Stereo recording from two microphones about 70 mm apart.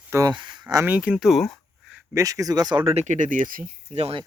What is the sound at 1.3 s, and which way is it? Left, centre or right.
Speech, centre.